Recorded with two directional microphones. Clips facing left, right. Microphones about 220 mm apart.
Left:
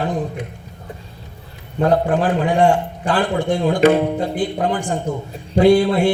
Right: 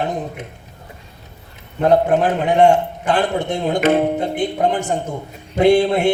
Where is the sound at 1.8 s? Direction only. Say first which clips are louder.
Right 2 dB; 20° right (ahead or behind).